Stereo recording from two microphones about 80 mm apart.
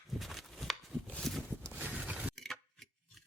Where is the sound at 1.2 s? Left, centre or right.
Centre.